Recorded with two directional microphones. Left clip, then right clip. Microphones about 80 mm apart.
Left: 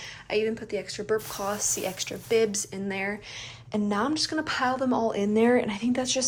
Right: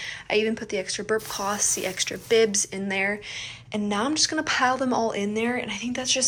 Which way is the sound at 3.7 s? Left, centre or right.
Left.